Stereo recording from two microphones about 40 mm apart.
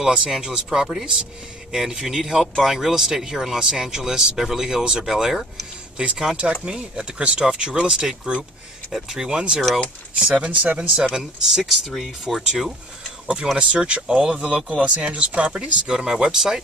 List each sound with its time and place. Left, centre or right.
0.0 s speech: centre; by 10.9 s right
11.1 s speech: centre
13.6 s speech: right